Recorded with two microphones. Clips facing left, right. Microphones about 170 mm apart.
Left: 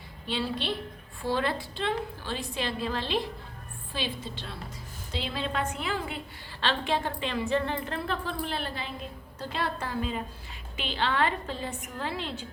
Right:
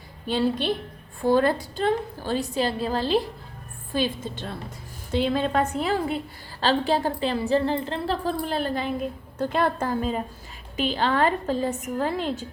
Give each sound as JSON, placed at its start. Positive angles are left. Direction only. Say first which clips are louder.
{"t": 0.3, "sound": "a woman's voice", "louder": "right 7 dB", "side_deg": -45}